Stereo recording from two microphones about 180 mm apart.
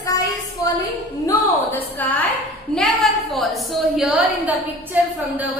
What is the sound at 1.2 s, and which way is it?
Speech, 10° left (ahead or behind).